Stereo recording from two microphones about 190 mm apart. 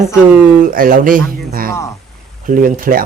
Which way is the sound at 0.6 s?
50° right (ahead or behind).